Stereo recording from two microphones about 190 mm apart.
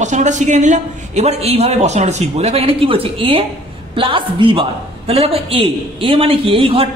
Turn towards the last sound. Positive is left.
turn(degrees=-30)  # may be behind; listen again after turning